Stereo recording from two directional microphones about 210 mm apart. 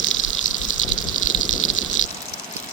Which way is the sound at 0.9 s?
40° left (ahead or behind).